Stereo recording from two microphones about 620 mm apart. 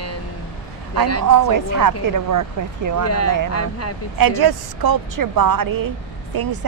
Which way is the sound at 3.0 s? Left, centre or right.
Left.